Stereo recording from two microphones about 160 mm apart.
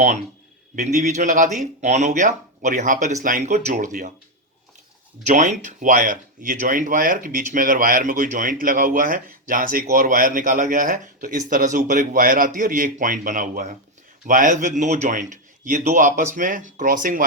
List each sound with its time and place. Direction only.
0.8 s a man's voice: 50° right (ahead or behind)
5.2 s a man's voice: 50° right (ahead or behind)